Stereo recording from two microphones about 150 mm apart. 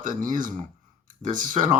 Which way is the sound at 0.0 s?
60° right (ahead or behind).